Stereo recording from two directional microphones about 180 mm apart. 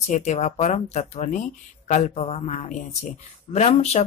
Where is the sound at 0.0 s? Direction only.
40° left (ahead or behind).